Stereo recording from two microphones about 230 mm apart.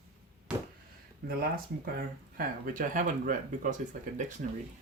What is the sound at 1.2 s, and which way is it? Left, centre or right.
Speech, right.